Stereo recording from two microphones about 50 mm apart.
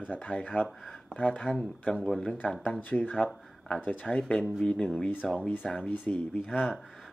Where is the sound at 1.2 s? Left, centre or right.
Left.